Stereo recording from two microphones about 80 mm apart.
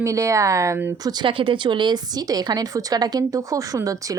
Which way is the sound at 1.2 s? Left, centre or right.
Right.